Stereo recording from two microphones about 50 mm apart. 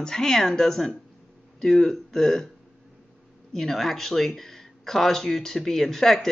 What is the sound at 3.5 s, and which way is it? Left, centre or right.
Speech, centre.